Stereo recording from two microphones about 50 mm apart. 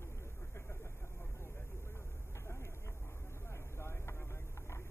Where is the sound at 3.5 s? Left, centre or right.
Left.